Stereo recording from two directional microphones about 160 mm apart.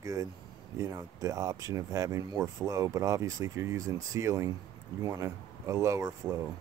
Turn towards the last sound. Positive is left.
turn(degrees=-20)  # may be behind; listen again after turning